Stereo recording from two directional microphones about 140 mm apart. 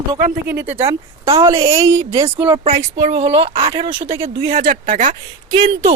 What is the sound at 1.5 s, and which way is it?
Speech, 20° right (ahead or behind).